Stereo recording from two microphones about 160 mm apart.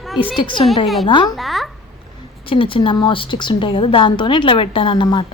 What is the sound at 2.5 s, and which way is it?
A woman's voice, 35° left (ahead or behind).